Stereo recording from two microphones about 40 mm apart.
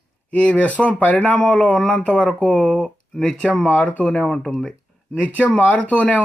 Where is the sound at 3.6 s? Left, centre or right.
Left.